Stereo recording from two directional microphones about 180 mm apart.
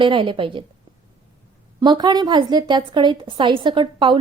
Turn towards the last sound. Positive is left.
turn(degrees=-25)  # may be behind; listen again after turning